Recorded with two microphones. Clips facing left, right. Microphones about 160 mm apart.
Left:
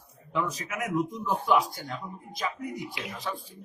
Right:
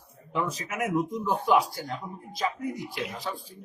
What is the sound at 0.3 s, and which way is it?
Speech, 30° right (ahead or behind).